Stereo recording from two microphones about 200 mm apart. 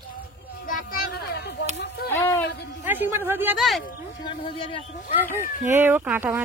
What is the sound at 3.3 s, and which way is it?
Speech, 10° right (ahead or behind).